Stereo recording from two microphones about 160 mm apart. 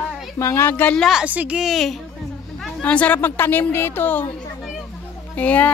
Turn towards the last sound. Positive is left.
turn(degrees=10)  # may be behind; listen again after turning